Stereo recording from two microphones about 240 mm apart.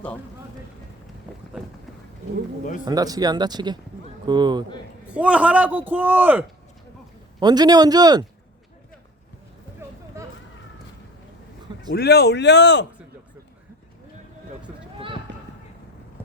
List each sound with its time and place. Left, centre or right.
1.5 s speech: centre
2.8 s a man's voice: centre
5.0 s a man's voice: centre
11.9 s a man's voice: left
14.9 s run: right